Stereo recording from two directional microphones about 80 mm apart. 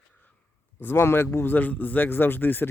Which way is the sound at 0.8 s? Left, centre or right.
Left.